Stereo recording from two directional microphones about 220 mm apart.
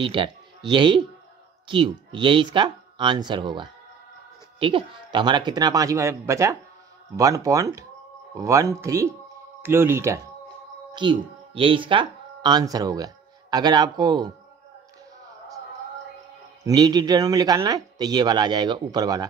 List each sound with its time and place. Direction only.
0.0 s speech: 20° right (ahead or behind)
16.6 s speech: 15° right (ahead or behind)